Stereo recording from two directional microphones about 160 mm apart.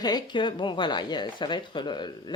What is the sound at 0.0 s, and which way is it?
Speech, 30° left (ahead or behind).